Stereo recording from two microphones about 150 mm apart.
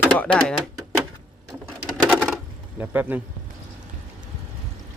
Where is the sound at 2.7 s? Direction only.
10° right (ahead or behind).